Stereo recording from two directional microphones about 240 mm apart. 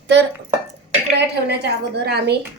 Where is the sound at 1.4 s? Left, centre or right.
Right.